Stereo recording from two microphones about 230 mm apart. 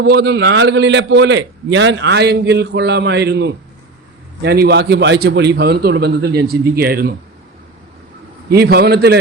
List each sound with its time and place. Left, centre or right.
0.0 s a man's voice: right
8.4 s a man's voice: right